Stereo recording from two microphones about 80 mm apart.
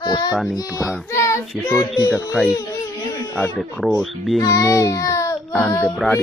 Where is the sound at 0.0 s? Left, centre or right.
Left.